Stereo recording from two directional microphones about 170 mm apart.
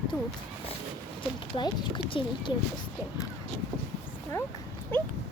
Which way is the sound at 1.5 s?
25° left (ahead or behind).